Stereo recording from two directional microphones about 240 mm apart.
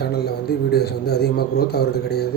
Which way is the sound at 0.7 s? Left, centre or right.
Left.